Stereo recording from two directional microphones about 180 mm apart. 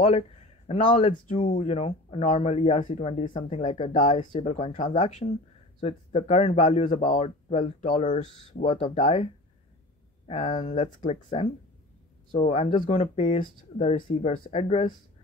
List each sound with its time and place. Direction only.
0.7 s speech: 45° left (ahead or behind)
1.0 s speech: 30° left (ahead or behind); by 8.1 s 45° left (ahead or behind)
8.1 s speech: 35° left (ahead or behind)
12.9 s speech: 40° left (ahead or behind)
13.9 s speech: 30° left (ahead or behind)